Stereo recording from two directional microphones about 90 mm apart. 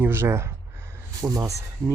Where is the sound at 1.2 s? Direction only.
40° right (ahead or behind).